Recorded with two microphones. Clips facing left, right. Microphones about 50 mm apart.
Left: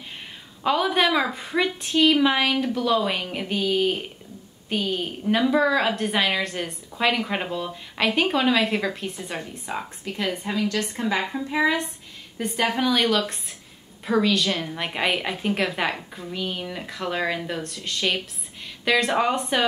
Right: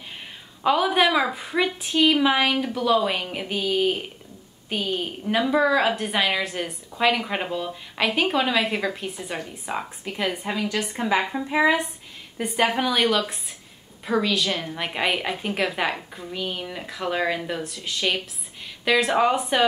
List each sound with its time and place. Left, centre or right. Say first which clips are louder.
0.7 s a woman's voice: right 1 dB; centre